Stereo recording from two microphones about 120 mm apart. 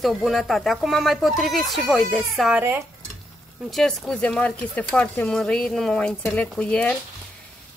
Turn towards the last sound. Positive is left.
turn(degrees=10)  # may be behind; listen again after turning